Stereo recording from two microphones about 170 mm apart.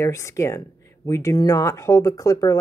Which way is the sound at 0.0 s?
15° left (ahead or behind).